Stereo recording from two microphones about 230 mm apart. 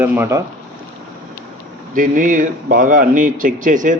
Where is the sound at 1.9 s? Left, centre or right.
Right.